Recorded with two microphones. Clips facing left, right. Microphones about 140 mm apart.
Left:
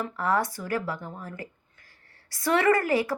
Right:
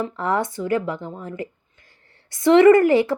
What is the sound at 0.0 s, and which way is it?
Speech, 25° right (ahead or behind).